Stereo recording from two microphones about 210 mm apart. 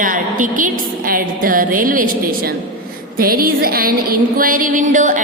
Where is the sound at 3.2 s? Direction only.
45° right (ahead or behind).